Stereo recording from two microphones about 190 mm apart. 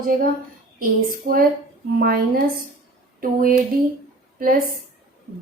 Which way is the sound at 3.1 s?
50° right (ahead or behind).